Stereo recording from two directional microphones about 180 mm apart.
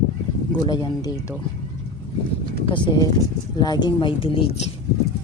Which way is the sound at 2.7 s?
25° left (ahead or behind).